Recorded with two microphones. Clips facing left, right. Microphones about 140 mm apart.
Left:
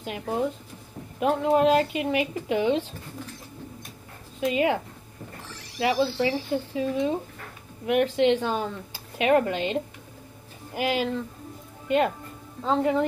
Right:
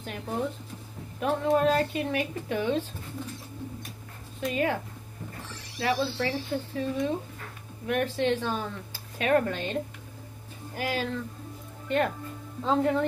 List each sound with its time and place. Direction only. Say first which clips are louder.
0.0 s a woman's voice: left 4 dB; 15° left (ahead or behind)
4.5 s a woman's voice: left 4 dB; 15° left (ahead or behind)
5.8 s a woman's voice: left 4 dB; 15° left (ahead or behind)
12.6 s speech: left 2 dB; centre (ahead or behind)